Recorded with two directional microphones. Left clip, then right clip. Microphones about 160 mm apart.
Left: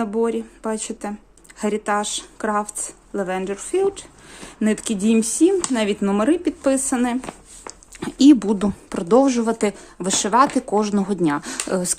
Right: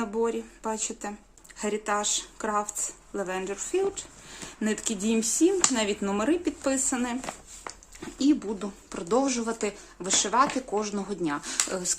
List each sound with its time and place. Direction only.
0.0 s speech: 35° left (ahead or behind)
7.9 s speech: 65° left (ahead or behind); by 11.9 s 45° left (ahead or behind)